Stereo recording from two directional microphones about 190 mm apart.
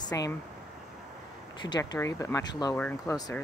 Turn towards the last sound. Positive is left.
turn(degrees=15)  # may be behind; listen again after turning